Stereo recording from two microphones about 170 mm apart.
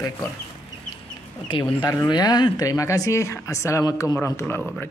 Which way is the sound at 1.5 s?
25° left (ahead or behind).